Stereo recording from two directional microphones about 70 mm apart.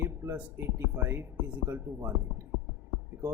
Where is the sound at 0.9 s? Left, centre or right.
Right.